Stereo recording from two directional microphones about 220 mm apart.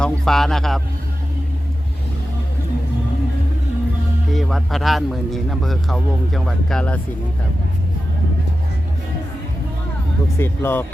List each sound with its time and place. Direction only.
0.0 s a man's voice: centre (ahead or behind)
4.3 s a man's voice: centre (ahead or behind)
10.3 s speech: 10° left (ahead or behind)